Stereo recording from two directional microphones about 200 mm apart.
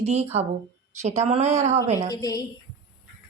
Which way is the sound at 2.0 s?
20° left (ahead or behind).